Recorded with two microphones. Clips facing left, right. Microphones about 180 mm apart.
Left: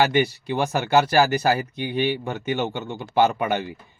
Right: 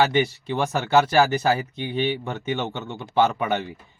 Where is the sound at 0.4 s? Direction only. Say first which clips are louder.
Left 1 dB; 15° left (ahead or behind).